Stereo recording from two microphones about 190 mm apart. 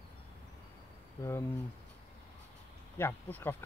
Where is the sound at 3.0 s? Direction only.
10° left (ahead or behind).